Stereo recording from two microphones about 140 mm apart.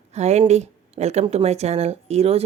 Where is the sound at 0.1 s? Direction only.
50° right (ahead or behind).